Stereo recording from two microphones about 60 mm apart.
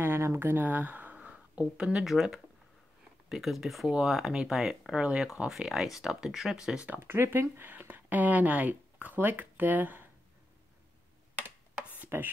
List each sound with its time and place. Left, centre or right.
0.0 s speech: right; by 6.9 s centre
7.0 s speech: right
12.1 s speech: right